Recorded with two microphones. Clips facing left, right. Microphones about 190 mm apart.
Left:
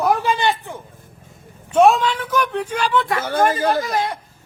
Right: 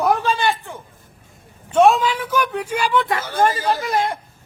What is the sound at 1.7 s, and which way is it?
Speech, 5° left (ahead or behind).